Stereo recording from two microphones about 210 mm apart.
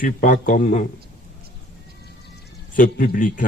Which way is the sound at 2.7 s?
40° left (ahead or behind).